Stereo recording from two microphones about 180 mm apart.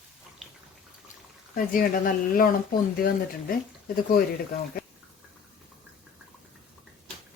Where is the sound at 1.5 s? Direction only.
50° left (ahead or behind).